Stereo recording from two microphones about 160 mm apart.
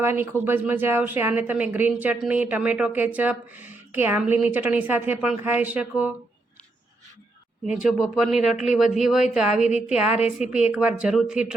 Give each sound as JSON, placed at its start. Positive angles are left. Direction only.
{"t": 0.0, "sound": "speech", "side_deg": -15}
{"t": 7.9, "sound": "speech", "side_deg": 0}
{"t": 9.6, "sound": "a woman's voice", "side_deg": 45}
{"t": 10.5, "sound": "speech", "side_deg": -5}